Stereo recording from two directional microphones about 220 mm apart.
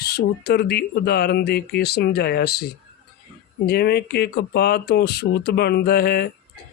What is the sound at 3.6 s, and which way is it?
Speech, 45° left (ahead or behind).